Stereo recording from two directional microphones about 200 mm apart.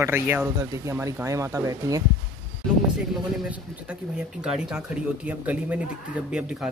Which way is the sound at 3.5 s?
5° right (ahead or behind).